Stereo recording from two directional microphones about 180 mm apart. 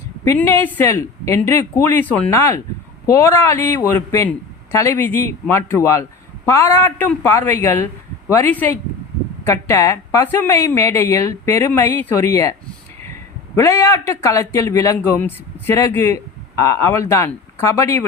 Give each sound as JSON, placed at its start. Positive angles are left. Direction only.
{"t": 0.3, "sound": "a man's voice", "side_deg": 15}
{"t": 13.6, "sound": "a man's voice", "side_deg": 15}